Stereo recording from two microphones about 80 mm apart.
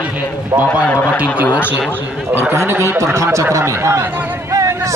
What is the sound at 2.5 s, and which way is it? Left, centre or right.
Speech, right.